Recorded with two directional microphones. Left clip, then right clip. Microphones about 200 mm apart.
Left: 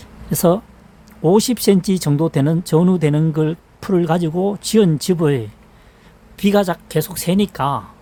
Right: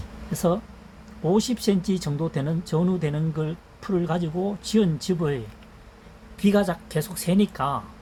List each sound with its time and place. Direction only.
0.3 s speech: 65° left (ahead or behind)